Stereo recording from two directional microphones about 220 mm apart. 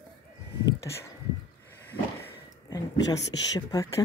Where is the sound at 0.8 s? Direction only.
10° left (ahead or behind).